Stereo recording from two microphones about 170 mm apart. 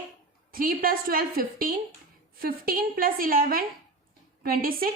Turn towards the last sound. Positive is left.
turn(degrees=-60)  # may be behind; listen again after turning